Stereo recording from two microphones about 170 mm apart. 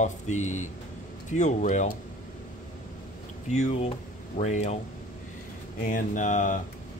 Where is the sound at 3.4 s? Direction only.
45° left (ahead or behind).